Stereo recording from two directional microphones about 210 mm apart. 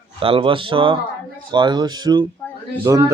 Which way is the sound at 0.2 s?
25° right (ahead or behind).